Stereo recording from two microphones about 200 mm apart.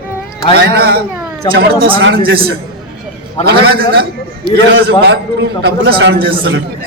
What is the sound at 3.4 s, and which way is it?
A man's voice, 55° right (ahead or behind).